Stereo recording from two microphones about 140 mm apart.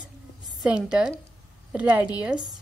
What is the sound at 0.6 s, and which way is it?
A woman's voice, 5° right (ahead or behind).